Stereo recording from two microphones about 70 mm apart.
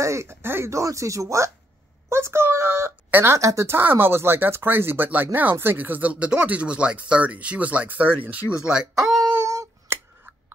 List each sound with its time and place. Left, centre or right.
0.0 s speech: right
0.7 s speech: right
2.0 s a sound: right
3.1 s speech: right
3.3 s speech: right
8.6 s speech: centre
9.9 s scissors: right